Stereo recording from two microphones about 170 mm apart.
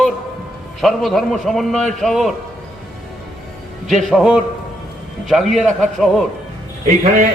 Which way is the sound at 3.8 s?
Centre (ahead or behind).